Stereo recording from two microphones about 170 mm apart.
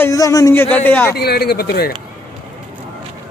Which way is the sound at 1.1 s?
70° left (ahead or behind).